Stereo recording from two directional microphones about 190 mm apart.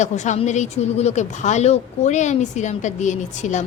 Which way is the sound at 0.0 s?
40° left (ahead or behind).